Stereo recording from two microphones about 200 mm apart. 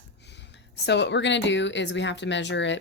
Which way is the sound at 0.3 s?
60° left (ahead or behind).